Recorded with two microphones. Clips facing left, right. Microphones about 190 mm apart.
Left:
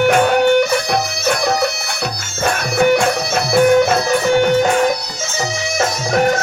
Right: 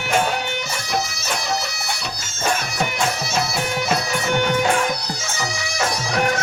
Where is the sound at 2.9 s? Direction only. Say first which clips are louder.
Left 9 dB; 60° left (ahead or behind).